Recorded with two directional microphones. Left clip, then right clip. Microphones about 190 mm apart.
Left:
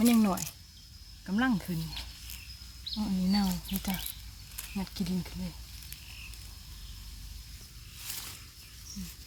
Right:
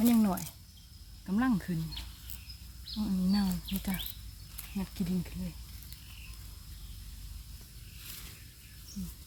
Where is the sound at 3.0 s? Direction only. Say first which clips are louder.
Left 1 dB; 15° left (ahead or behind).